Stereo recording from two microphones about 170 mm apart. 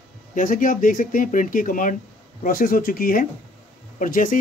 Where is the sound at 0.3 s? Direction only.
50° left (ahead or behind).